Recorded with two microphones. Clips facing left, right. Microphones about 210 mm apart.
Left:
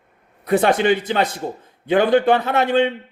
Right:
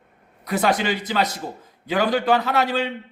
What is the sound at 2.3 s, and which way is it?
Speech, 25° left (ahead or behind).